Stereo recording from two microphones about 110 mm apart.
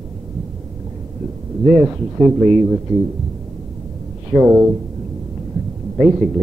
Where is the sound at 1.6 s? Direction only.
5° right (ahead or behind).